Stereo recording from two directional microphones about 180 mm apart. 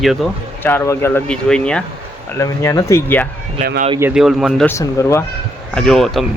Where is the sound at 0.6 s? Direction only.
10° left (ahead or behind).